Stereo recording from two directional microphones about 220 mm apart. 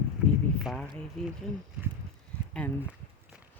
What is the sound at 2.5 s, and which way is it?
Speech, 5° left (ahead or behind).